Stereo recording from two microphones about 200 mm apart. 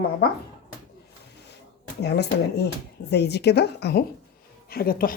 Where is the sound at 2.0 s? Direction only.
55° left (ahead or behind).